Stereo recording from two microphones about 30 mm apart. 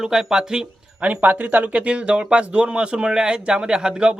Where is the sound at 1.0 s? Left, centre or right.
Right.